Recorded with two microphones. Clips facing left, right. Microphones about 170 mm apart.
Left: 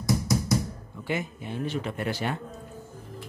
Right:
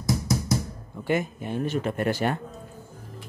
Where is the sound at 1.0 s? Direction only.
50° right (ahead or behind).